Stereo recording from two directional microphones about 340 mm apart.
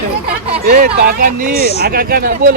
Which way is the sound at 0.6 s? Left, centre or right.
Right.